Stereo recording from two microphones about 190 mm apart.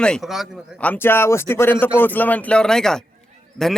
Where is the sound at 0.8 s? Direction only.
10° left (ahead or behind).